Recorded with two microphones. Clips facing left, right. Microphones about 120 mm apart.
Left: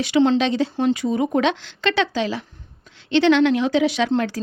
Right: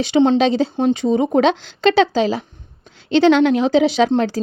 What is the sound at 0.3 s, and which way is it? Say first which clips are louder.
Speech: right 4 dB; 35° right (ahead or behind).